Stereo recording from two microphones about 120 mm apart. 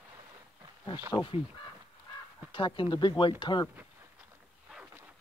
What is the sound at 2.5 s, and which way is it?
Speech, 45° left (ahead or behind).